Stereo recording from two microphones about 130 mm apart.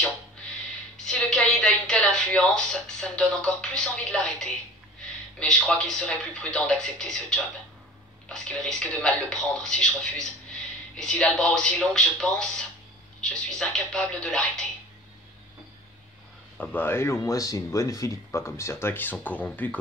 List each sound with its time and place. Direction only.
0.9 s a sound: 5° left (ahead or behind)
5.4 s speech: 5° left (ahead or behind)
16.5 s speech: 15° left (ahead or behind)